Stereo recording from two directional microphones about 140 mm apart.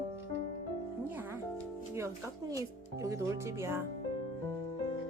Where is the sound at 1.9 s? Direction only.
25° right (ahead or behind).